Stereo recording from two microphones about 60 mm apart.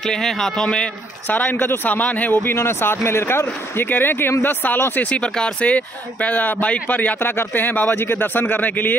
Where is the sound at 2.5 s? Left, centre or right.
Left.